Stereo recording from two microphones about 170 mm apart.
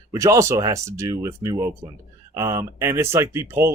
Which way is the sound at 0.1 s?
20° right (ahead or behind).